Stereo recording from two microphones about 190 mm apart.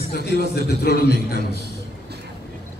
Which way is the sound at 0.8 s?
55° left (ahead or behind).